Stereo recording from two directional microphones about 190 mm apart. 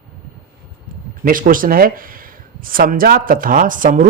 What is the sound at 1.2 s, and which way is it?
Speech, 45° right (ahead or behind).